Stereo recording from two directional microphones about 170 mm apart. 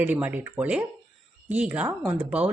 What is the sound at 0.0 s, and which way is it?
Speech, 10° right (ahead or behind).